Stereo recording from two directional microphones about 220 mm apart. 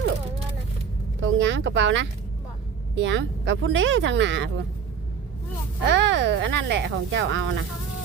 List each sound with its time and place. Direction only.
1.2 s speech: 55° right (ahead or behind)
5.8 s speech: 55° right (ahead or behind)